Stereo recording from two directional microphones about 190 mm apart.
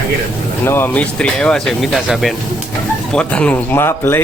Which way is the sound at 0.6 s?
10° left (ahead or behind).